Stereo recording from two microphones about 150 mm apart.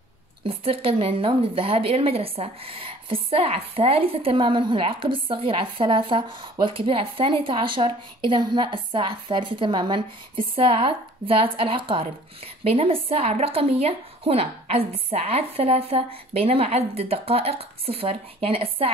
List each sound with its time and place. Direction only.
0.4 s a woman's voice: 35° right (ahead or behind)